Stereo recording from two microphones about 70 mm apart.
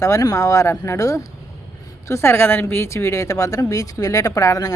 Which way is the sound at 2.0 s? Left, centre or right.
Left.